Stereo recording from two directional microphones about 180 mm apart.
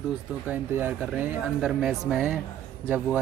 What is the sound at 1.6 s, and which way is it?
Speech, 5° right (ahead or behind).